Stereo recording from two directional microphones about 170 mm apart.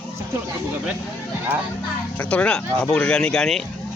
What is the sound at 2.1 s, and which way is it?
Speech, 5° left (ahead or behind).